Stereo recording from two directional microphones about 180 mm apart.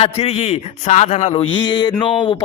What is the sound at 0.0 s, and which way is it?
Speech, 35° left (ahead or behind).